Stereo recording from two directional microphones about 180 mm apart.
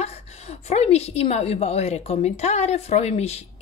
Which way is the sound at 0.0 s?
35° left (ahead or behind).